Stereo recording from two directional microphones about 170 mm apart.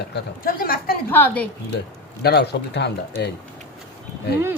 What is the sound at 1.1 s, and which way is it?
Speech, 10° left (ahead or behind).